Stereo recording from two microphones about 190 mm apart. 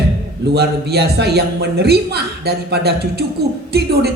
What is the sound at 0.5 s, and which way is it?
Speech, 60° right (ahead or behind).